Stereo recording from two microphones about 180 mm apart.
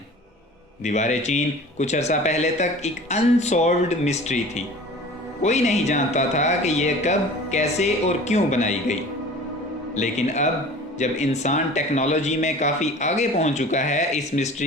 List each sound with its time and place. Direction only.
0.8 s speech: 40° left (ahead or behind)